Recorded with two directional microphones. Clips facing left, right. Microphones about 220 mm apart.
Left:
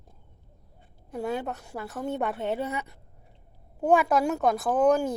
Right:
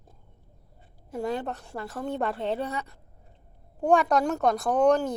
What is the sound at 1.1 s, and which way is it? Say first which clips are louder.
A woman's voice: even; 5° left (ahead or behind).